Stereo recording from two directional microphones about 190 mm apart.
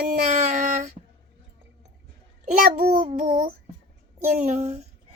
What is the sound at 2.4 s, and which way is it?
Speech, 45° right (ahead or behind).